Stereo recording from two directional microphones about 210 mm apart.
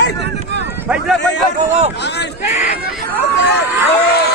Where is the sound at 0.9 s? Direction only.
Centre (ahead or behind).